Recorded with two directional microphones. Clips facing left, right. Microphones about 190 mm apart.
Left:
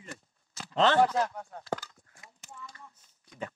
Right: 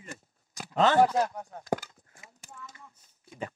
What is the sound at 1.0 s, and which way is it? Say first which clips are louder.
Speech: right 2 dB; 15° right (ahead or behind).